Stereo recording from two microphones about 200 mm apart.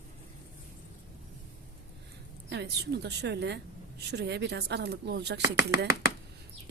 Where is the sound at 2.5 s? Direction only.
55° right (ahead or behind).